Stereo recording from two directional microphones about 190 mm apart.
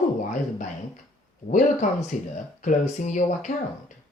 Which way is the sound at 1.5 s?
45° left (ahead or behind).